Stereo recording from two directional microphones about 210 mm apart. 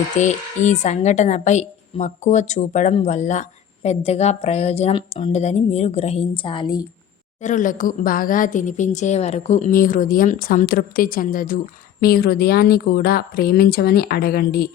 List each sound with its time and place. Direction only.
0.2 s a woman's voice: 35° left (ahead or behind)
7.4 s a woman's voice: 40° left (ahead or behind)